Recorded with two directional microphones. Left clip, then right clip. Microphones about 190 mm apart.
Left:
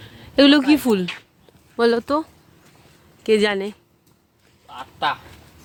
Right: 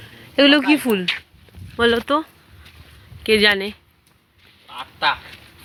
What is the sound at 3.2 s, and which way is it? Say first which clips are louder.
Speech: right 3 dB; 15° left (ahead or behind).